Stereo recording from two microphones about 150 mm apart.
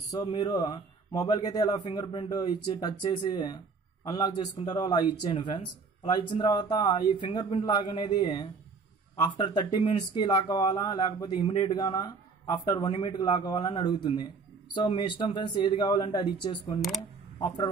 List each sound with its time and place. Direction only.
0.1 s speech: 30° left (ahead or behind)
11.4 s speech: 40° left (ahead or behind)
11.8 s speech: 25° left (ahead or behind)